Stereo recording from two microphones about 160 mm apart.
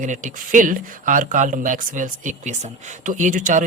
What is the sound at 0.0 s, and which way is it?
A woman's voice, 50° right (ahead or behind).